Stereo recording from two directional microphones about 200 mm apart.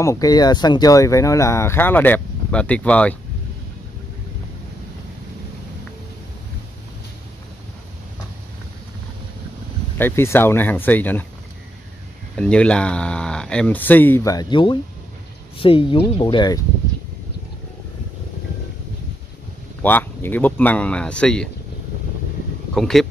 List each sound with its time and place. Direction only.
0.0 s speech: 15° left (ahead or behind)
9.9 s speech: 10° left (ahead or behind)
12.4 s speech: 5° left (ahead or behind); by 16.6 s 20° left (ahead or behind)
19.8 s speech: 10° left (ahead or behind)
22.8 s speech: centre (ahead or behind)